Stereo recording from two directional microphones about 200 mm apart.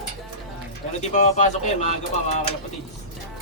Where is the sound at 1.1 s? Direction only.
35° left (ahead or behind).